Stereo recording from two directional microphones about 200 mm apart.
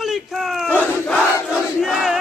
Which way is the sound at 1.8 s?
5° right (ahead or behind).